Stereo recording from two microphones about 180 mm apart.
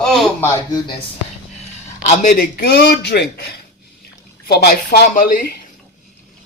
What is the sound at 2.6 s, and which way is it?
Speech, 65° left (ahead or behind).